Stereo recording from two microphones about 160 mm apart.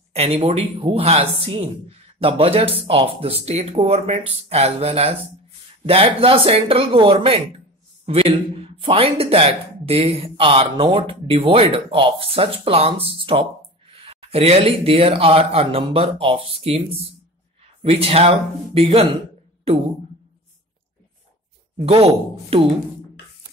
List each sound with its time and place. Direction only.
0.1 s speech: 40° right (ahead or behind)
21.7 s speech: 40° right (ahead or behind)